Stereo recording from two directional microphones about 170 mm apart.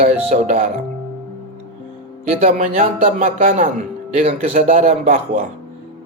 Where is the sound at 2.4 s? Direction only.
45° right (ahead or behind).